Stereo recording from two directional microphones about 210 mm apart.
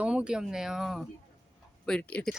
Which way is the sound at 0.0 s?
5° right (ahead or behind).